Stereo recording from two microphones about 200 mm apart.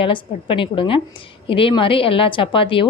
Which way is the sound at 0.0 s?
25° left (ahead or behind).